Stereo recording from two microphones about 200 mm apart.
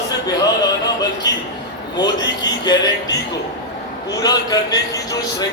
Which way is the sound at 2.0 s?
20° left (ahead or behind).